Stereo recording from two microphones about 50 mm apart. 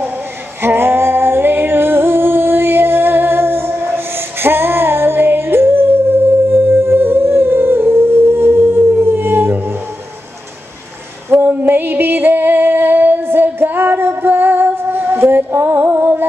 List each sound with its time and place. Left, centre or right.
0.6 s female singing: right
11.2 s a sound: right
11.5 s music: right